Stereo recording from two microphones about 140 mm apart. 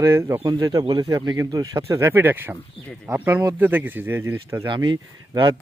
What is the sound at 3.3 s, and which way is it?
Speech, 25° right (ahead or behind).